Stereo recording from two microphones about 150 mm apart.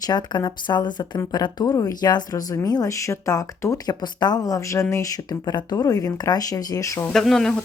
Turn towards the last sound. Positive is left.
turn(degrees=5)  # may be behind; listen again after turning